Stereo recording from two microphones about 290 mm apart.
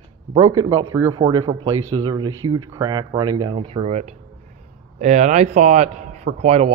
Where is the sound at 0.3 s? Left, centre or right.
Centre.